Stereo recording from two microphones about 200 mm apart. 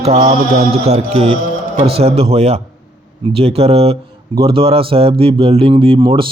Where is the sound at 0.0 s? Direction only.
35° right (ahead or behind).